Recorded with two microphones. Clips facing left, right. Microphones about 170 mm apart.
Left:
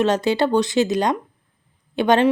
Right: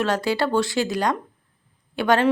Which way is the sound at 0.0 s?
20° left (ahead or behind).